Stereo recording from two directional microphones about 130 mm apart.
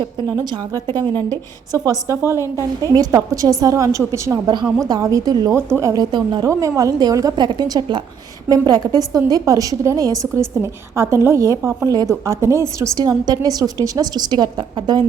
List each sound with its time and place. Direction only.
0.0 s a woman's voice: 30° right (ahead or behind)
5.5 s a woman's voice: 20° right (ahead or behind); by 6.4 s 35° right (ahead or behind)
6.4 s a woman's voice: 25° right (ahead or behind)